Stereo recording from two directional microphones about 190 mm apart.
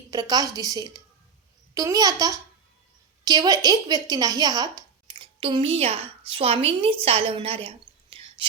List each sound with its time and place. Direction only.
0.1 s a woman's voice: 20° right (ahead or behind)
8.1 s whispering: 30° right (ahead or behind)